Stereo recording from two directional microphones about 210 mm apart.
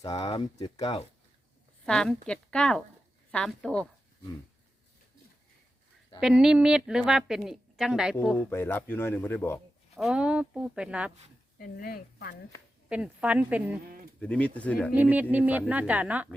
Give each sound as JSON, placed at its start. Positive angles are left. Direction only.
{"t": 0.2, "sound": "speech", "side_deg": 25}
{"t": 1.8, "sound": "a woman's voice", "side_deg": 5}
{"t": 6.1, "sound": "a woman's voice", "side_deg": 0}
{"t": 8.4, "sound": "speech", "side_deg": 10}
{"t": 9.9, "sound": "a woman's voice", "side_deg": 0}
{"t": 11.5, "sound": "speech", "side_deg": 45}
{"t": 12.9, "sound": "speech", "side_deg": -5}
{"t": 14.2, "sound": "a woman's voice", "side_deg": 5}
{"t": 15.1, "sound": "speech", "side_deg": -10}